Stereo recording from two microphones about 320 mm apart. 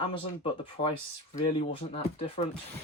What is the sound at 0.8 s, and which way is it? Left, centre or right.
Speech, left.